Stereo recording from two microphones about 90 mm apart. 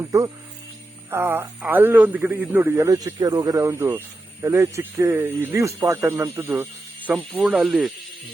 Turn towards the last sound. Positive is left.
turn(degrees=-5)  # may be behind; listen again after turning